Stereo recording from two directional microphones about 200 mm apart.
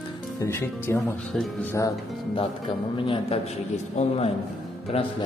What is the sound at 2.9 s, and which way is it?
A man's voice, 25° left (ahead or behind).